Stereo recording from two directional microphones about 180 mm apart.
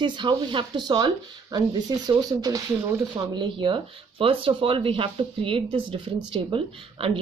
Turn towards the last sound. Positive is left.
turn(degrees=-30)  # may be behind; listen again after turning